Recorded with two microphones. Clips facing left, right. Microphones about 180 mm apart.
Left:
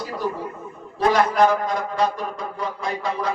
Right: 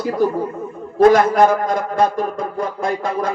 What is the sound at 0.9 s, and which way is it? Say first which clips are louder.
A man's voice: right 7 dB; 50° right (ahead or behind).